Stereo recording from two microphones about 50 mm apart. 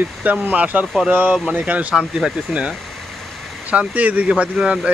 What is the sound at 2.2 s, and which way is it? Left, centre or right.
Speech, centre.